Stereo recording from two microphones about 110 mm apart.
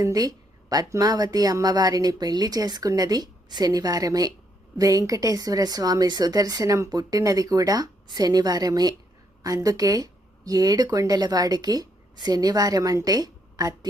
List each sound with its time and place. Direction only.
0.0 s speech: 35° right (ahead or behind)